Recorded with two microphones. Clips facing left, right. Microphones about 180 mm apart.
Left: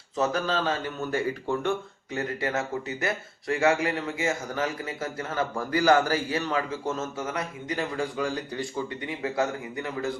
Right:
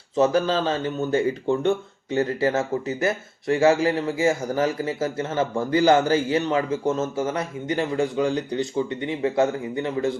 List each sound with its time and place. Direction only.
0.2 s speech: 30° right (ahead or behind)